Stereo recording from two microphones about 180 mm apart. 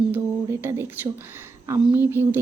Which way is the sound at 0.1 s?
15° right (ahead or behind).